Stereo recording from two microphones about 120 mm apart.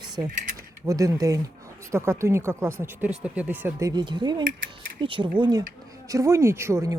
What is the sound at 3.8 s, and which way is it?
Speech, 35° right (ahead or behind).